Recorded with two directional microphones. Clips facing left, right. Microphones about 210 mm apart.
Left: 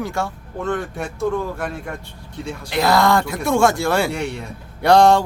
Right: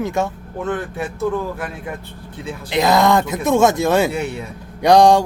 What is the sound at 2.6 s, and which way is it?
Speech, 20° right (ahead or behind).